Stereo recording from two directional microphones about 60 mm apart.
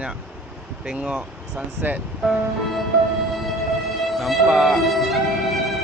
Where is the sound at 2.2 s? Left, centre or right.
Centre.